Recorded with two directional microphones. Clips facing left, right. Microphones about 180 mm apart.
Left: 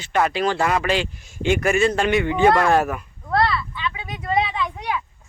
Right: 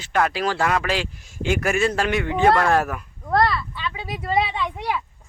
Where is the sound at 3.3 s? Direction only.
45° right (ahead or behind).